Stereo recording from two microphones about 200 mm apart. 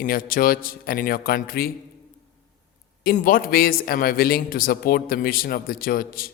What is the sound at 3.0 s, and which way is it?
A man's voice, 45° left (ahead or behind).